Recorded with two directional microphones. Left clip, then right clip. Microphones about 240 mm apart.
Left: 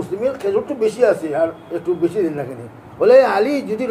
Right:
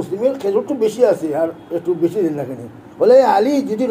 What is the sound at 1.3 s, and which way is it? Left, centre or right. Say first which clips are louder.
Speech: even; centre.